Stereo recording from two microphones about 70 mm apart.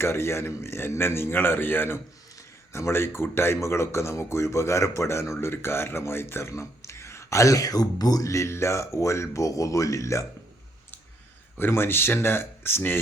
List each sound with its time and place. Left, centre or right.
0.0 s speech: left
11.5 s speech: left